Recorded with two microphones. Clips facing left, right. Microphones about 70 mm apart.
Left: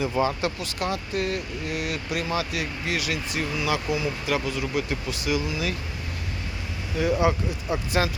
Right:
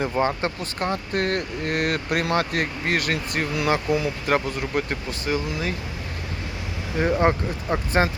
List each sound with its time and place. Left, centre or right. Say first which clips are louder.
0.2 s speech: right 1 dB; right
6.9 s speech: right 2 dB; right